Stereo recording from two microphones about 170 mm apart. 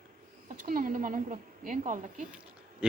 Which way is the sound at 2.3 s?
5° right (ahead or behind).